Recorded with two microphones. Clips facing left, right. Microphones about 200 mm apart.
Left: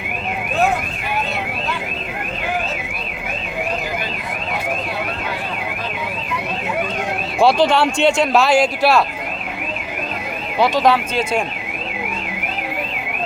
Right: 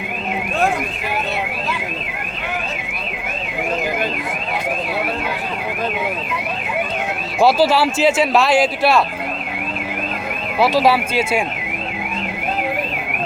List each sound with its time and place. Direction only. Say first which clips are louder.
7.3 s speech: even; 5° right (ahead or behind)
10.6 s speech: right 1 dB; 5° right (ahead or behind)